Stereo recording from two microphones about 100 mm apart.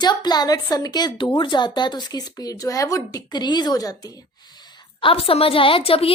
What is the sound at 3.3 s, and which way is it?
Speech, 45° left (ahead or behind).